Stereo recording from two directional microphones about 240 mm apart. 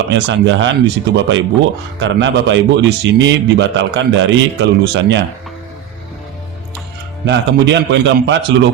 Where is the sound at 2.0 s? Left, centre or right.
Right.